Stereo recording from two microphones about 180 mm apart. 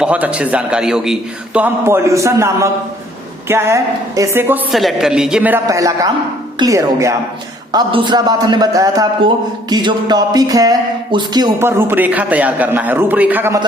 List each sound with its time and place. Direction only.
0.0 s a man's voice: 5° right (ahead or behind)